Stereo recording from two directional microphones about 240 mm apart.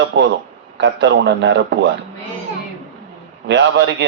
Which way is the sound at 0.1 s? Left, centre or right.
Right.